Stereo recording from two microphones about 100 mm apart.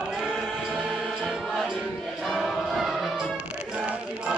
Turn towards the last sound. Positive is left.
turn(degrees=-10)  # may be behind; listen again after turning